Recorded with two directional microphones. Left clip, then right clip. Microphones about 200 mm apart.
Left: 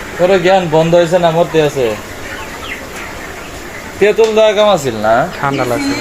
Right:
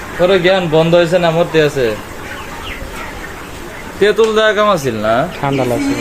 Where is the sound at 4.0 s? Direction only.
25° right (ahead or behind).